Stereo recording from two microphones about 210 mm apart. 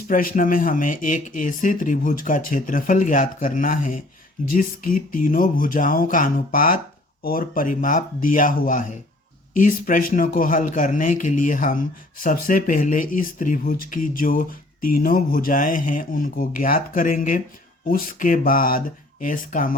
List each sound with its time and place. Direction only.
0.1 s speech: 40° left (ahead or behind)